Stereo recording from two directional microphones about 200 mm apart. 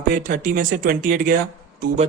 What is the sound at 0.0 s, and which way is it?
Speech, 40° right (ahead or behind).